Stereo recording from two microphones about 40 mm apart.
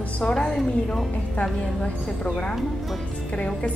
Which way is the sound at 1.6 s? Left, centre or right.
Left.